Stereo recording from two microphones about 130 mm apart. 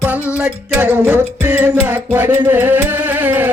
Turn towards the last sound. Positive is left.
turn(degrees=-15)  # may be behind; listen again after turning